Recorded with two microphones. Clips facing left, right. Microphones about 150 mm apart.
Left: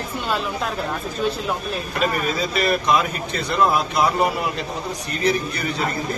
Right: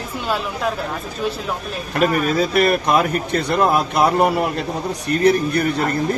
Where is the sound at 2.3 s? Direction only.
55° right (ahead or behind).